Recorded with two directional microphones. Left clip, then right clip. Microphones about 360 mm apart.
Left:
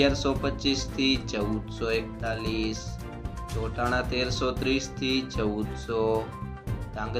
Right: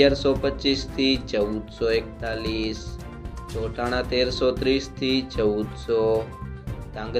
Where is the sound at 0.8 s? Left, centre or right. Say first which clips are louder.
Right 3 dB; left.